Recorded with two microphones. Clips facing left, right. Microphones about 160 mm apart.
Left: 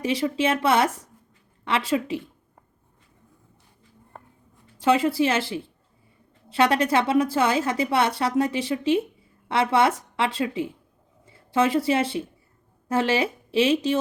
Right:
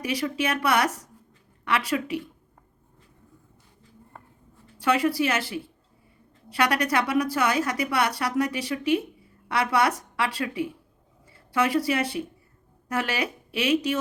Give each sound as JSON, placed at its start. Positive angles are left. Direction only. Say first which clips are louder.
{"t": 0.0, "sound": "a woman's voice", "louder": "left 4 dB", "side_deg": 25}
{"t": 4.8, "sound": "a woman's voice", "louder": "left 3 dB", "side_deg": 25}